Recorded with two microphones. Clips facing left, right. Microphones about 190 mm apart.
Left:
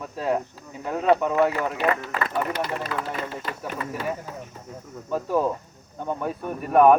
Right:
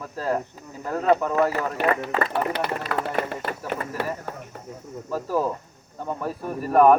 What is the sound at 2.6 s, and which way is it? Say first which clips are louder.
Speech: right 2 dB; 65° right (ahead or behind).